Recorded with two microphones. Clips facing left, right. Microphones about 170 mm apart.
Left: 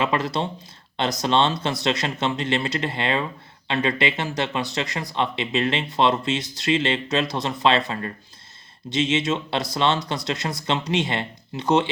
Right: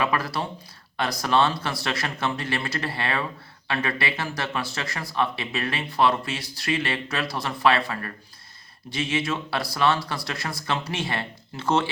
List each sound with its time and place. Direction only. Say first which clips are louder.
0.0 s speech: left 3 dB; 20° left (ahead or behind)